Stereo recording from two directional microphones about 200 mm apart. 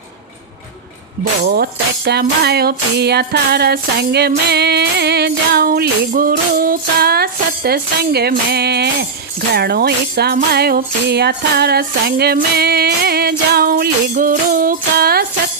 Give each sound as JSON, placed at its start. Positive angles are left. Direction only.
{"t": 1.5, "sound": "music", "side_deg": -50}